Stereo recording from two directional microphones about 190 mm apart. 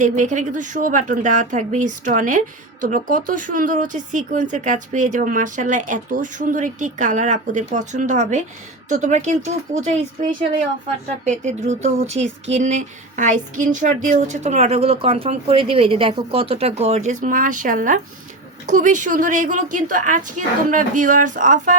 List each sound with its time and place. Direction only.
0.0 s speech: 40° right (ahead or behind)
11.3 s a woman's voice: 40° right (ahead or behind)